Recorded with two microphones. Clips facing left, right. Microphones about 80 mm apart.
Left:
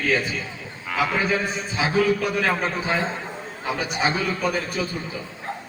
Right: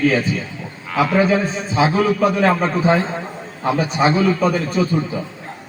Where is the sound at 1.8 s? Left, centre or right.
Right.